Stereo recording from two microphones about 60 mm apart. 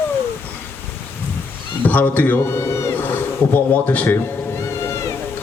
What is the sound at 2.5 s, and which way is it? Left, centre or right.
Cat, left.